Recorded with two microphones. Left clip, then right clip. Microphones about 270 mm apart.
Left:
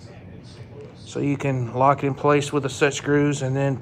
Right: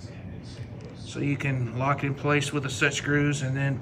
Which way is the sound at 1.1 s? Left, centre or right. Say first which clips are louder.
Left 5 dB; centre.